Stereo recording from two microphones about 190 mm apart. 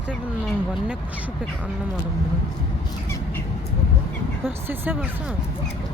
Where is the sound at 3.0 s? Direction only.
15° left (ahead or behind).